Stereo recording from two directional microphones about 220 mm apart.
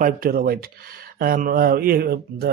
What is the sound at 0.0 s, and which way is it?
Speech, 40° right (ahead or behind).